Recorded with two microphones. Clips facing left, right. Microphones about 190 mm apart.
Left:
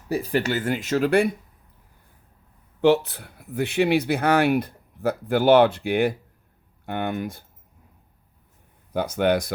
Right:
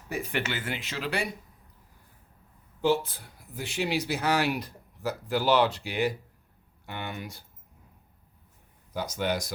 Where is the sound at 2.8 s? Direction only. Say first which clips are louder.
Left 7 dB; 70° left (ahead or behind); by 7.4 s 50° left (ahead or behind).